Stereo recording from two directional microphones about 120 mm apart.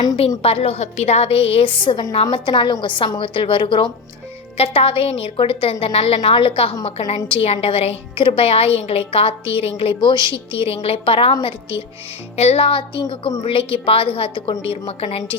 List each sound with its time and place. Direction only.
0.4 s a woman's voice: 55° left (ahead or behind)
4.5 s a woman's voice: 55° left (ahead or behind)
12.4 s a woman's voice: 60° left (ahead or behind)